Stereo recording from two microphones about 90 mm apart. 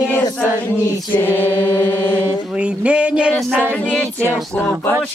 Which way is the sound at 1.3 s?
25° right (ahead or behind).